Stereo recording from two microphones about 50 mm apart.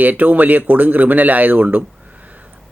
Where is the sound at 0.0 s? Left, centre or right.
Right.